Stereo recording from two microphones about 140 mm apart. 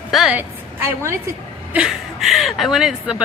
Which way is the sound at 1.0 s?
20° right (ahead or behind).